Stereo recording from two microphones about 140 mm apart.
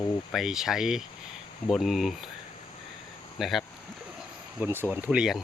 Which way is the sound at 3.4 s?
Centre (ahead or behind).